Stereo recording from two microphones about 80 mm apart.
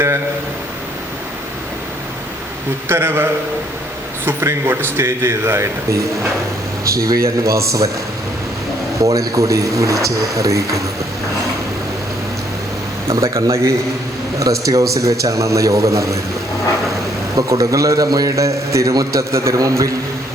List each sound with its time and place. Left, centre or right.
2.9 s a man's voice: right
4.3 s a man's voice: right
9.0 s a man's voice: right
13.1 s a man's voice: right
17.3 s a man's voice: right